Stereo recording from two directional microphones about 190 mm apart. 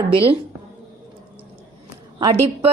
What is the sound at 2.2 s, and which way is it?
Speech, 30° right (ahead or behind).